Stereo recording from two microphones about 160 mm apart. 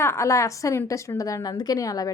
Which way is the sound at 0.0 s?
15° left (ahead or behind).